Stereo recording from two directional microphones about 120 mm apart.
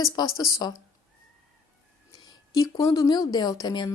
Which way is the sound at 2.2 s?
30° left (ahead or behind).